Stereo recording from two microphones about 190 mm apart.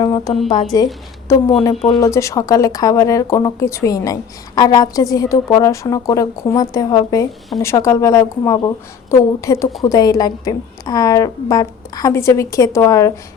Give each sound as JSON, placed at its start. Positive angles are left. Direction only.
{"t": 0.0, "sound": "music", "side_deg": 20}
{"t": 0.4, "sound": "a woman's voice", "side_deg": 25}
{"t": 2.0, "sound": "a woman's voice", "side_deg": 15}